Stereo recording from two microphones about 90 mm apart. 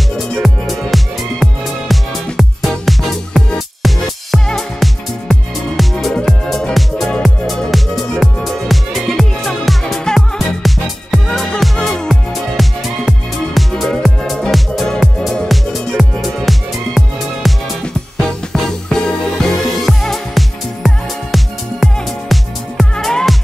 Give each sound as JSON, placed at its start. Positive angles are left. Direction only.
{"t": 0.2, "sound": "music", "side_deg": 0}
{"t": 18.5, "sound": "music", "side_deg": 5}